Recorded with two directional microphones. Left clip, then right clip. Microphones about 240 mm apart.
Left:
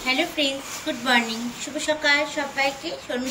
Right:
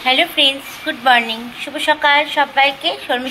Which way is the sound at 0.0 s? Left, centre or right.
Centre.